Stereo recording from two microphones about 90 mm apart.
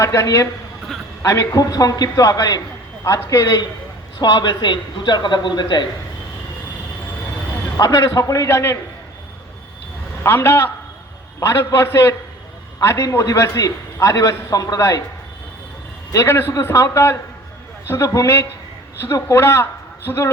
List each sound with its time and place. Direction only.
0.0 s a man's voice: 35° left (ahead or behind)
4.2 s a man's voice: 50° left (ahead or behind)
7.8 s a man's voice: 40° left (ahead or behind)
10.2 s a man's voice: 25° left (ahead or behind)
16.1 s a man's voice: 30° left (ahead or behind)